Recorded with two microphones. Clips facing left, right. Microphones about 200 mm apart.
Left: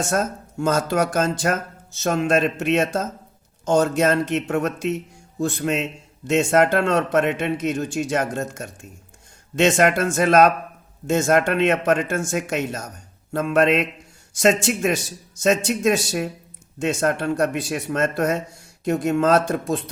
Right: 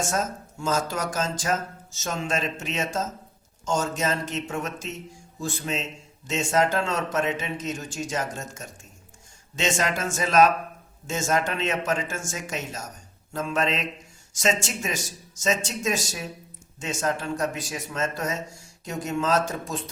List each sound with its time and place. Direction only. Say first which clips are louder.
0.0 s a man's voice: left 5 dB; 60° left (ahead or behind)